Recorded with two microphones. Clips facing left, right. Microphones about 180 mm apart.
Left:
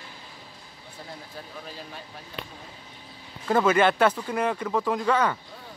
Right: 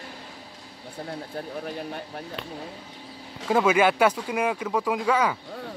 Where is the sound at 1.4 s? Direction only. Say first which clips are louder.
Right 9 dB; 55° right (ahead or behind).